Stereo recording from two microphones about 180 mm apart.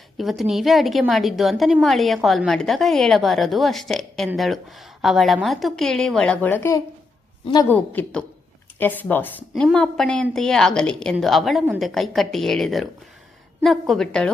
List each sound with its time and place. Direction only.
0.2 s a woman's voice: centre (ahead or behind); by 7.7 s 25° left (ahead or behind)
7.7 s a woman's voice: 10° left (ahead or behind)